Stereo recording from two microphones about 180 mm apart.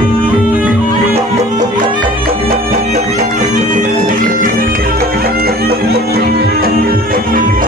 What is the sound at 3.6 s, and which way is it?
Music, 45° right (ahead or behind).